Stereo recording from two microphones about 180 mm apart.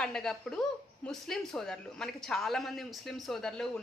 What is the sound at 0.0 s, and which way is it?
A woman's voice, centre (ahead or behind).